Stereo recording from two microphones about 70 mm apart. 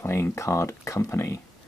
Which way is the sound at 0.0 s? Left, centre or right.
Left.